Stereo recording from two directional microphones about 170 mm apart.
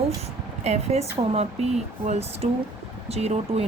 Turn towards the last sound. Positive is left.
turn(degrees=-40)  # may be behind; listen again after turning